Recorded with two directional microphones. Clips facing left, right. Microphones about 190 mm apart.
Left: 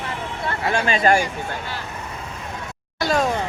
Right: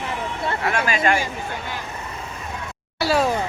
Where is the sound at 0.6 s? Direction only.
30° left (ahead or behind).